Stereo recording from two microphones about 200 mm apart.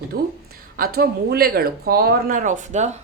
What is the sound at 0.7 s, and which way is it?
Speech, 50° right (ahead or behind).